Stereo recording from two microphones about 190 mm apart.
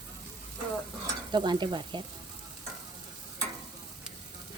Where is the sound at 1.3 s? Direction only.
25° right (ahead or behind).